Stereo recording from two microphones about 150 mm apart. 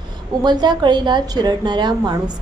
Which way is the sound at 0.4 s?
30° right (ahead or behind).